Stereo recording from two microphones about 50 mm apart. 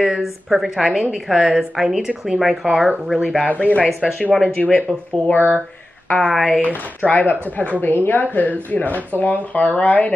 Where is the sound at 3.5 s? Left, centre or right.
Left.